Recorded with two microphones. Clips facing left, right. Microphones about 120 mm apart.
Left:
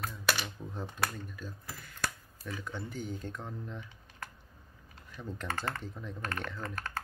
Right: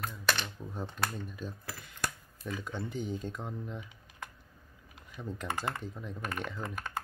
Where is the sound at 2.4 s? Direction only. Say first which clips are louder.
Right 2 dB; 20° right (ahead or behind).